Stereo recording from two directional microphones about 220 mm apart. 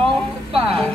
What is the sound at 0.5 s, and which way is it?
Music, 25° right (ahead or behind).